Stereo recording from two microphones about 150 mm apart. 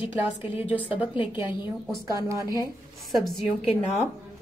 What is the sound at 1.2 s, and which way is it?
Speech, 35° left (ahead or behind).